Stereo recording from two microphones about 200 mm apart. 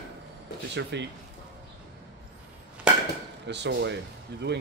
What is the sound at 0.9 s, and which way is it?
Speech, 60° right (ahead or behind).